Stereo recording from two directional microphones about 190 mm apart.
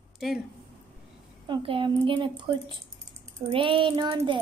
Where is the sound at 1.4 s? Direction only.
25° right (ahead or behind).